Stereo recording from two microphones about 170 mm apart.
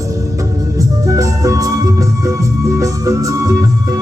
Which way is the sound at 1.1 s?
20° right (ahead or behind).